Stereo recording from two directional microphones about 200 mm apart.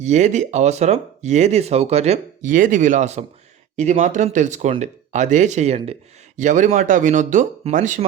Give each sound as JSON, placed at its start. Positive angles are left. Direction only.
{"t": 0.0, "sound": "speech", "side_deg": -35}